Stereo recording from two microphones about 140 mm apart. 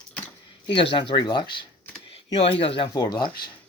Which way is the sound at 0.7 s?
35° left (ahead or behind).